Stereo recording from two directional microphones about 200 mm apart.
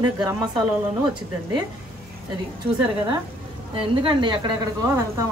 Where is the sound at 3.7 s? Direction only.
25° right (ahead or behind).